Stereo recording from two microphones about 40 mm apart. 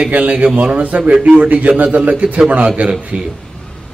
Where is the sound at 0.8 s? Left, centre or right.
Right.